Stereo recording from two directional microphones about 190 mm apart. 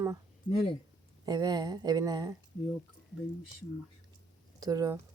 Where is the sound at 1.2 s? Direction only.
20° right (ahead or behind).